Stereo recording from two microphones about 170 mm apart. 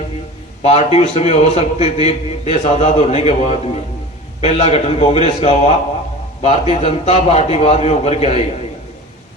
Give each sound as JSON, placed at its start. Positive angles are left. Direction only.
{"t": 0.6, "sound": "a man's voice", "side_deg": 35}